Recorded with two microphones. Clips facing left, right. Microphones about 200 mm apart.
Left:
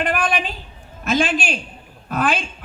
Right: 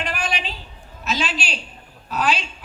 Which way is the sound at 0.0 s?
55° left (ahead or behind).